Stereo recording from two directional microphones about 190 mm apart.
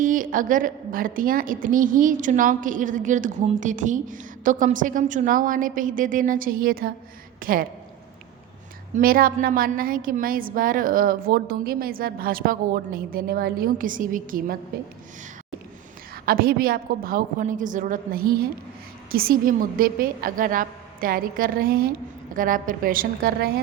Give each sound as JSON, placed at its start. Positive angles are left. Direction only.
{"t": 0.0, "sound": "a woman's voice", "side_deg": -45}
{"t": 9.0, "sound": "a woman's voice", "side_deg": -50}
{"t": 16.2, "sound": "a woman's voice", "side_deg": -50}